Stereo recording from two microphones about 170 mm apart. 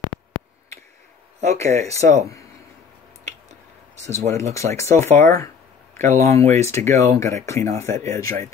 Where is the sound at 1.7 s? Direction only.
40° right (ahead or behind).